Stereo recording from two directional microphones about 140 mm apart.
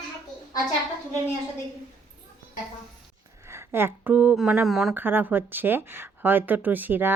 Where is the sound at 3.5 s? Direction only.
15° right (ahead or behind); by 4.9 s centre (ahead or behind).